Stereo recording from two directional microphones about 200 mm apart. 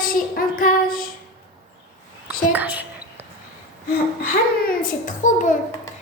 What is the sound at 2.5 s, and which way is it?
Speech, 5° right (ahead or behind).